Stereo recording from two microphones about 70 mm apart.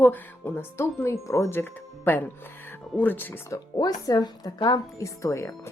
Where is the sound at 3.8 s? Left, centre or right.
Left.